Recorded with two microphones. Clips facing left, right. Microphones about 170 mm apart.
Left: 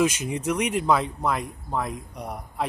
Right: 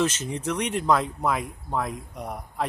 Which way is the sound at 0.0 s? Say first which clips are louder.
Left 2 dB; 10° left (ahead or behind).